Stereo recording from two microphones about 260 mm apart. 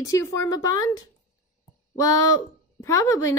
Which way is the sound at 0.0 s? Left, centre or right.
Centre.